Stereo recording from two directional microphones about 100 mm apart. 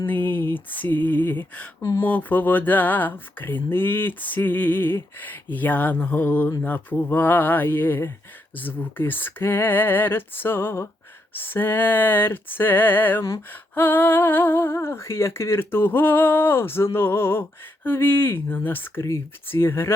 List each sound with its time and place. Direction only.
0.0 s speech: 20° left (ahead or behind)